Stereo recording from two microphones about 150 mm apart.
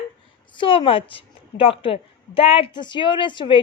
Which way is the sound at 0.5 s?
30° left (ahead or behind).